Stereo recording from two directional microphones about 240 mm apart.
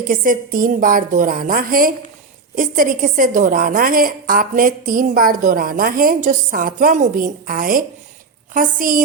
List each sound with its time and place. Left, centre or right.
0.0 s a woman's voice: right